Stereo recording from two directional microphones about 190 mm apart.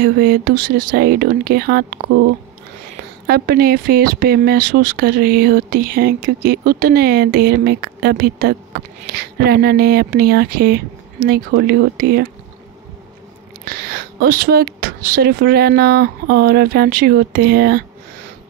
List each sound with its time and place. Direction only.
0.0 s speech: 50° right (ahead or behind)
3.3 s speech: 55° right (ahead or behind)
13.7 s speech: 55° right (ahead or behind)